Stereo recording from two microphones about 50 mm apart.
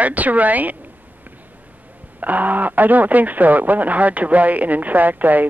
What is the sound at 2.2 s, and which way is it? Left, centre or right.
Speech, right.